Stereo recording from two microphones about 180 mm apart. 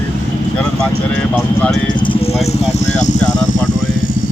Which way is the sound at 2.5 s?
40° left (ahead or behind).